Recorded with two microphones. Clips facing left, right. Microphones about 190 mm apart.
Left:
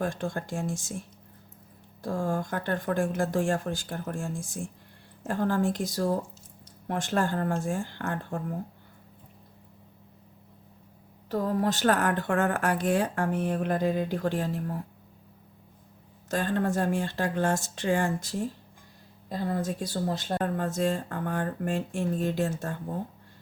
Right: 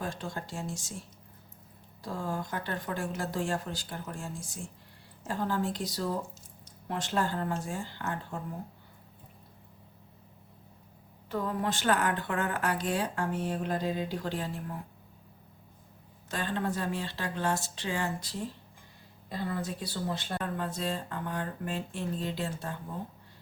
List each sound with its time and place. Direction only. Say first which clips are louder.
0.0 s speech: left 6 dB; 50° left (ahead or behind)
2.0 s speech: left 6 dB; 50° left (ahead or behind)
11.3 s speech: left 5 dB; 40° left (ahead or behind)
16.3 s speech: left 5 dB; 45° left (ahead or behind)